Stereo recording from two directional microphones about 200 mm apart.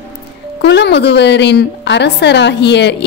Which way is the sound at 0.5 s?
55° left (ahead or behind).